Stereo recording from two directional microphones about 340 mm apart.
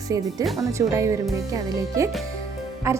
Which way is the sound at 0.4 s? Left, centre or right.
Centre.